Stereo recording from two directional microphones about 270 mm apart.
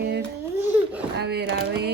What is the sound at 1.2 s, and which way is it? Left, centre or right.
Speech, right.